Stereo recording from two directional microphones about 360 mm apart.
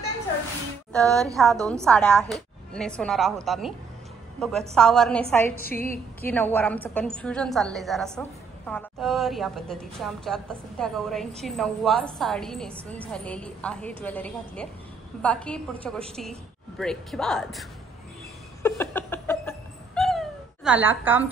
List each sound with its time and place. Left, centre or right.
0.9 s a woman's voice: centre
5.6 s a woman's voice: left
6.2 s a woman's voice: centre
18.6 s cat: centre